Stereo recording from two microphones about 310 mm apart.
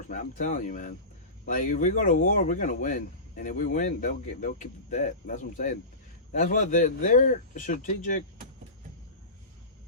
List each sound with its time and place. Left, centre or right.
0.1 s speech: left